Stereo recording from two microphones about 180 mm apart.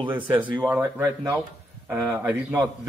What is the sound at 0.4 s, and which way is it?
A man's voice, 10° right (ahead or behind).